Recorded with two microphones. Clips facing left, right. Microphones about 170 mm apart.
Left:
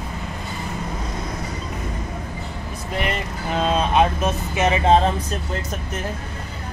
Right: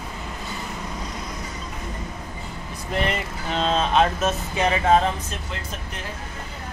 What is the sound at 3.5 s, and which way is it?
Speech, 10° left (ahead or behind).